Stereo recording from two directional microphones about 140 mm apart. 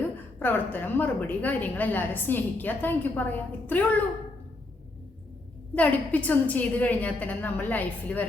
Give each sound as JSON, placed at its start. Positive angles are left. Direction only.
{"t": 0.3, "sound": "a woman's voice", "side_deg": 15}
{"t": 5.7, "sound": "a woman's voice", "side_deg": 10}